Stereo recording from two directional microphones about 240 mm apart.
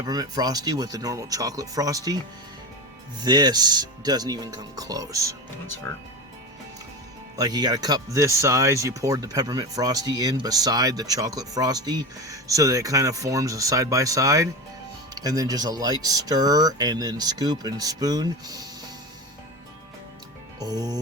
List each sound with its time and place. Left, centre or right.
0.0 s speech: centre
3.2 s speech: centre
7.3 s speech: centre
20.6 s speech: centre